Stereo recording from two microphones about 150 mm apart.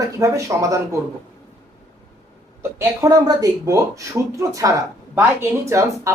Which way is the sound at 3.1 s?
25° right (ahead or behind).